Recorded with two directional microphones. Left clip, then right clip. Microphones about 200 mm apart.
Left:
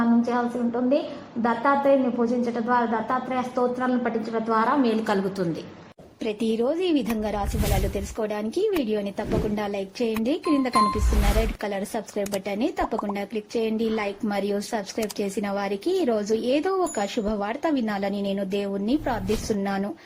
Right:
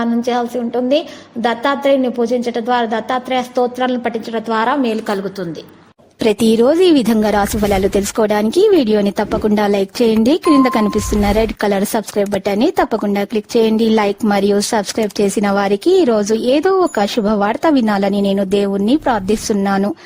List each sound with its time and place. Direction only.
0.0 s a woman's voice: 35° right (ahead or behind)
6.2 s speech: 65° right (ahead or behind)